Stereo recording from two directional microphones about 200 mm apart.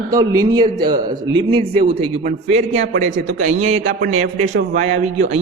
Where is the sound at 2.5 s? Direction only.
35° right (ahead or behind).